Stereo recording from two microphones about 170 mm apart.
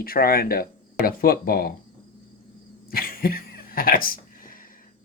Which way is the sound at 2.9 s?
60° left (ahead or behind).